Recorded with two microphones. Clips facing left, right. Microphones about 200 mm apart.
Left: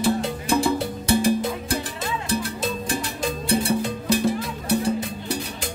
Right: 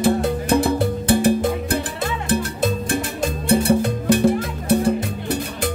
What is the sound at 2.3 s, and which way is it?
Music, 50° right (ahead or behind).